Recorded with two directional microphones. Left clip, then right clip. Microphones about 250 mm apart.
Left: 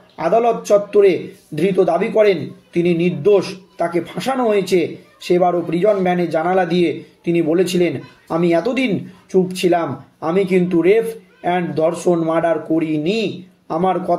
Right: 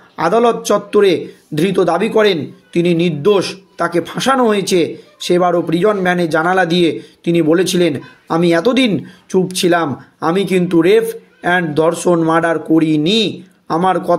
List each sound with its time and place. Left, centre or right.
0.2 s speech: right